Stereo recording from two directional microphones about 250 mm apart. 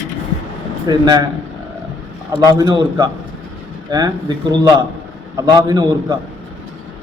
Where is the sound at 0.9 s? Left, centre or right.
Centre.